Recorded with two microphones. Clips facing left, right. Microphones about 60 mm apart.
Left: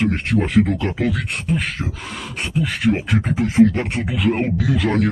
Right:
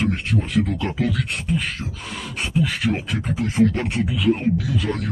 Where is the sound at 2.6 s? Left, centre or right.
Centre.